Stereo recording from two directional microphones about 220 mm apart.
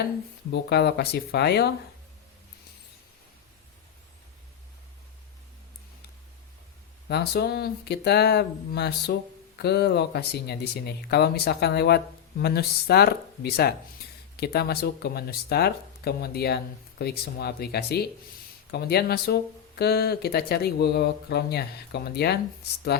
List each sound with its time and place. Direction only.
0.5 s speech: 45° left (ahead or behind)
7.1 s speech: 45° left (ahead or behind)